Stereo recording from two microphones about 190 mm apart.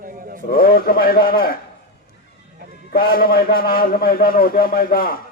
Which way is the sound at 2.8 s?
50° left (ahead or behind).